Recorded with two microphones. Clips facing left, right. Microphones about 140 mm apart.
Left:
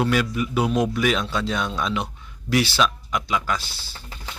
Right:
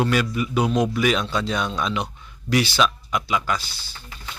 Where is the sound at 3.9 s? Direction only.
35° left (ahead or behind).